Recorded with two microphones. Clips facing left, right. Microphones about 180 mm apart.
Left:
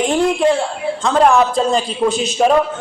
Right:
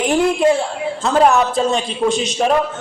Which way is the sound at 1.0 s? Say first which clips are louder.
Left 1 dB; 5° right (ahead or behind).